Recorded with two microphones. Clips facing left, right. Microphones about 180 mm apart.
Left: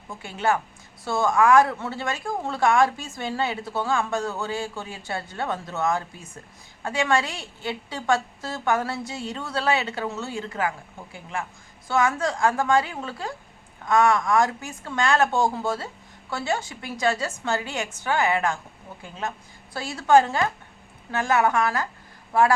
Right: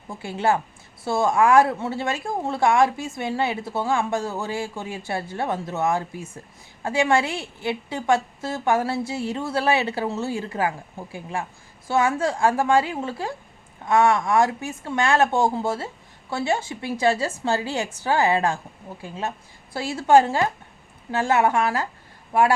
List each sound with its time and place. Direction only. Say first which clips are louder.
0.3 s a woman's voice: right 2 dB; 30° right (ahead or behind)
19.7 s a woman's voice: right 2 dB; 25° right (ahead or behind)